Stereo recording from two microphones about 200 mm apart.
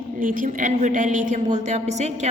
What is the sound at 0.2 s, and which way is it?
A woman's voice, 40° right (ahead or behind).